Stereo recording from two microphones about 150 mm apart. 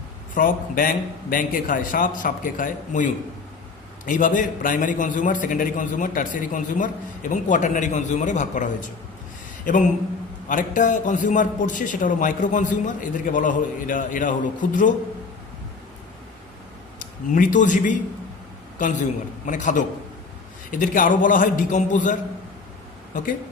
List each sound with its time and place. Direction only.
0.3 s a man's voice: 70° left (ahead or behind)
17.3 s a man's voice: 60° left (ahead or behind)